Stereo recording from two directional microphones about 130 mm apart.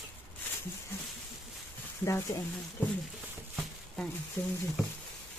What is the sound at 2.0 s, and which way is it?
Speech, 25° left (ahead or behind).